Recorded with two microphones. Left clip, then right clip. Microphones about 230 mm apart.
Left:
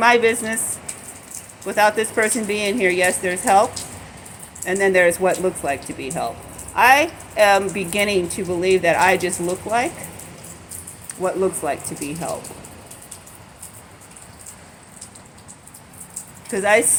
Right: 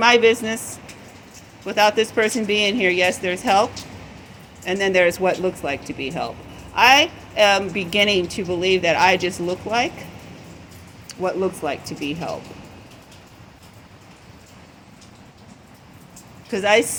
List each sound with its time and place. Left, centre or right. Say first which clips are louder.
0.0 s a woman's voice: right 1 dB; right
1.6 s a woman's voice: even; right
11.2 s speech: left 2 dB; right
16.5 s a woman's voice: even; right